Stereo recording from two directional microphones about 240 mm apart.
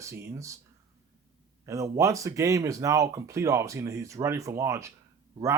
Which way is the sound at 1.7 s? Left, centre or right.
Centre.